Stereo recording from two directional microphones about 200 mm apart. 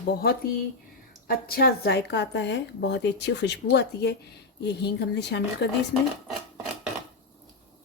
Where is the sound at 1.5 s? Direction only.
50° left (ahead or behind).